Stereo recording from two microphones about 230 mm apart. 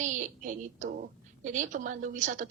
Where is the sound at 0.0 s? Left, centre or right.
Right.